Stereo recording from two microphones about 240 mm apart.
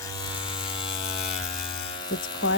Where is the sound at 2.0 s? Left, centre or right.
Centre.